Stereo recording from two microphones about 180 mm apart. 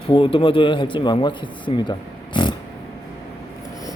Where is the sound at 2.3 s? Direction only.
25° left (ahead or behind).